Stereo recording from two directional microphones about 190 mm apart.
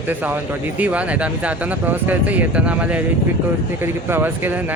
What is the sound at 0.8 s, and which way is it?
Speech, 5° right (ahead or behind).